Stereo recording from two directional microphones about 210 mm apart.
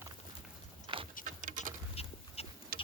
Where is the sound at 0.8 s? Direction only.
25° right (ahead or behind).